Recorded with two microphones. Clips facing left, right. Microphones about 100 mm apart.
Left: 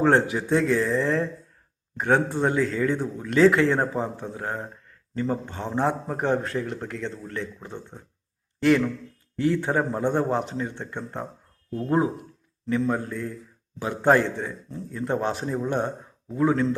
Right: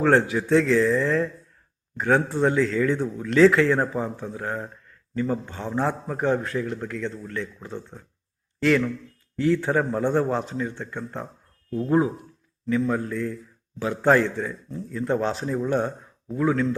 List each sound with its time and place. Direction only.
0.0 s a man's voice: 25° left (ahead or behind)